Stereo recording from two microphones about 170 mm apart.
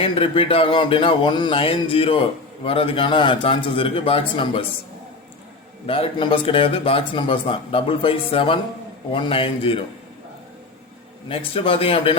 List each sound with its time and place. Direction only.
0.0 s a man's voice: 35° left (ahead or behind)
5.8 s a man's voice: 35° left (ahead or behind)
11.3 s a man's voice: 35° left (ahead or behind)